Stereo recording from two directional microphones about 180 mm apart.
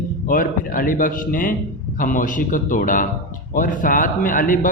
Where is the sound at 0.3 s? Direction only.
50° left (ahead or behind).